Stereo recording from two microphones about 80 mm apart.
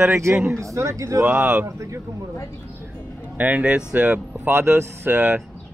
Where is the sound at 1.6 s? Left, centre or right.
Right.